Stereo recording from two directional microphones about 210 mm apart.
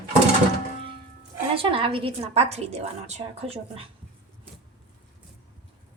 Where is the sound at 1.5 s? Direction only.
25° right (ahead or behind).